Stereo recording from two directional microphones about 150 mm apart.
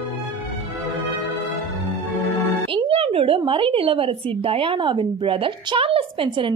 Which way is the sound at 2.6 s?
35° right (ahead or behind).